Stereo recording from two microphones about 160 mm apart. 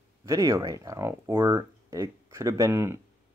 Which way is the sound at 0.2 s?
20° right (ahead or behind).